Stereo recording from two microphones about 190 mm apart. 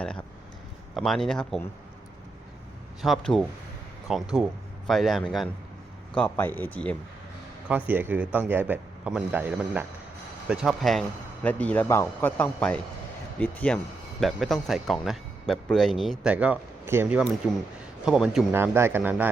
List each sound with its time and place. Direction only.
0.0 s a man's voice: 5° left (ahead or behind)
3.0 s a man's voice: centre (ahead or behind)
7.7 s a man's voice: 10° right (ahead or behind)